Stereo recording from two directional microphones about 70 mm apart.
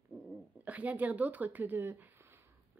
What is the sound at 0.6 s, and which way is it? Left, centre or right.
A woman's voice, right.